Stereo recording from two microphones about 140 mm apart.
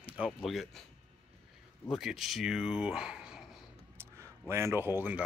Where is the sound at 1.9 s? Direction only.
Centre (ahead or behind).